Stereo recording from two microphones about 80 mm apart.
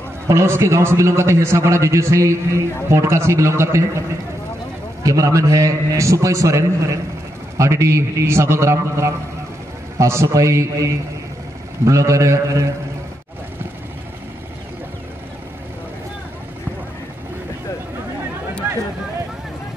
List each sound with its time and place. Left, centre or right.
0.3 s a man's voice: right
5.0 s a man's voice: right
18.6 s a sound: right